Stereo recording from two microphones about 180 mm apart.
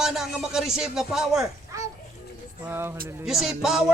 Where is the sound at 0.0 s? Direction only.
Centre (ahead or behind).